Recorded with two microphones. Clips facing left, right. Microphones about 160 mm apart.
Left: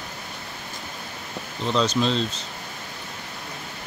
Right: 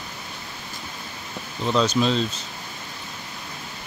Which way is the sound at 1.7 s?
5° right (ahead or behind).